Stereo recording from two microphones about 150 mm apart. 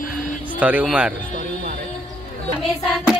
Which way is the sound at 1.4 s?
70° right (ahead or behind).